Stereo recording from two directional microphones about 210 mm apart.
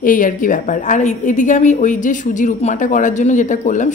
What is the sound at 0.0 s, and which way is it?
A woman's voice, 40° left (ahead or behind).